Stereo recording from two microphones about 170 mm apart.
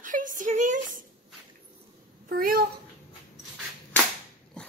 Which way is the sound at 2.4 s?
55° right (ahead or behind).